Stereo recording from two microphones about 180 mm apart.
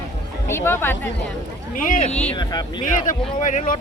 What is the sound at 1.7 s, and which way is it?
Speech, 45° left (ahead or behind).